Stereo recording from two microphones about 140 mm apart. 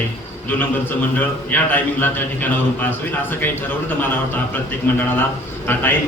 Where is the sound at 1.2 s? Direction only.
15° left (ahead or behind).